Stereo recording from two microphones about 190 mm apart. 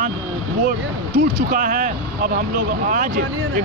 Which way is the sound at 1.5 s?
45° right (ahead or behind).